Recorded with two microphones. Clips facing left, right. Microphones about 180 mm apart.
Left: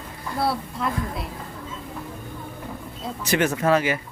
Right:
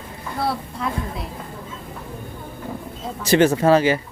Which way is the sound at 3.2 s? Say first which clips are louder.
Right 6 dB; 30° right (ahead or behind).